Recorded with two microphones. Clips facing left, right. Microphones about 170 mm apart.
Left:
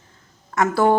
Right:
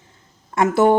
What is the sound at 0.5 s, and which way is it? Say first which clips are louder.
Speech: right 2 dB; 20° right (ahead or behind).